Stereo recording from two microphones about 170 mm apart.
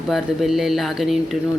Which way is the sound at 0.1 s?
Centre (ahead or behind).